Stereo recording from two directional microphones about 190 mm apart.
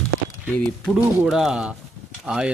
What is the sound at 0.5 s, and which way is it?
Speech, centre (ahead or behind).